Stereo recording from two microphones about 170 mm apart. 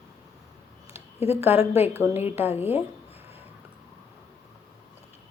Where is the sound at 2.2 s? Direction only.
10° right (ahead or behind).